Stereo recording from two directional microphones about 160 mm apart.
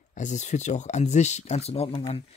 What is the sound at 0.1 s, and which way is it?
Speech, 50° left (ahead or behind).